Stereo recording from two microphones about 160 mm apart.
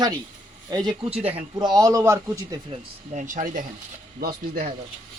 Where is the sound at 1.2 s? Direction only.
40° right (ahead or behind).